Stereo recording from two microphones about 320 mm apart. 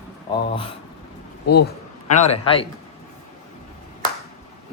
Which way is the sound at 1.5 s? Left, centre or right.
Left.